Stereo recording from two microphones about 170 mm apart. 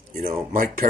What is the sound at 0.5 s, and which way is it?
Speech, 55° right (ahead or behind).